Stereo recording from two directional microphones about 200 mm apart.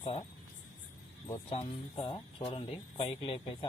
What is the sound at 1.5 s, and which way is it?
Speech, 30° left (ahead or behind).